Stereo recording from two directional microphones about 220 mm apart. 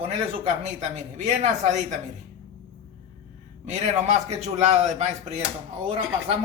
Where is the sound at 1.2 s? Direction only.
30° right (ahead or behind).